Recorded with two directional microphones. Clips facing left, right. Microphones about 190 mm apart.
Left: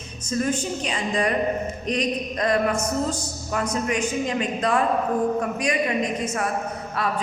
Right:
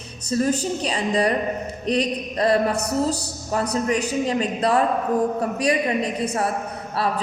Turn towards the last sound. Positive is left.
turn(degrees=-35)  # may be behind; listen again after turning